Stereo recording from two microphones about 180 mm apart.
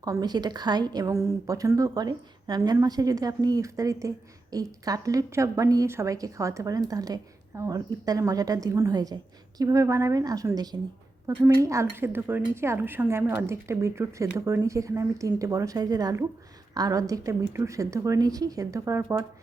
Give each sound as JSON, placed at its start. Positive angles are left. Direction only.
{"t": 0.0, "sound": "a woman's voice", "side_deg": -20}